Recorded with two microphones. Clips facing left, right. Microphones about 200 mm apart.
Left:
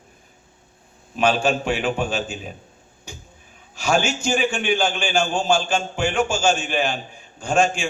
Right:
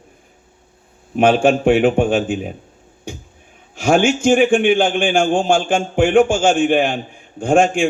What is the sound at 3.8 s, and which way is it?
A man's voice, 55° right (ahead or behind).